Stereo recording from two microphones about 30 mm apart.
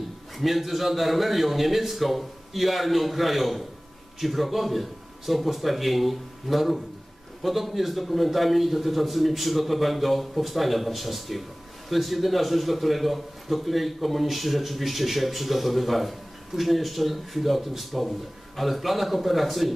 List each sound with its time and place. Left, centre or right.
0.4 s a man's voice: centre